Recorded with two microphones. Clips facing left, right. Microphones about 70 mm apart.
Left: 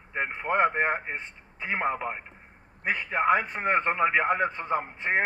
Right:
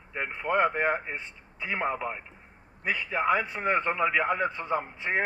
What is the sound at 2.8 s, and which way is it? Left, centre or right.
A man's voice, left.